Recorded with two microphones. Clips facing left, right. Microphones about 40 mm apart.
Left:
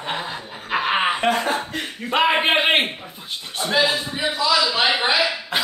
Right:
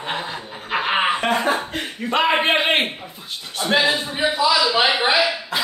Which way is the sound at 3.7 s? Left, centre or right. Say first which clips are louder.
Right 1 dB; right.